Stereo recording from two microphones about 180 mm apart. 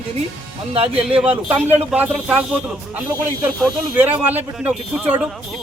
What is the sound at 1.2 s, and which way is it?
Speech, 10° right (ahead or behind).